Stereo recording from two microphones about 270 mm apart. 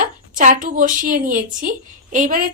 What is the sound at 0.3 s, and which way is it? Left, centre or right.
A woman's voice, right.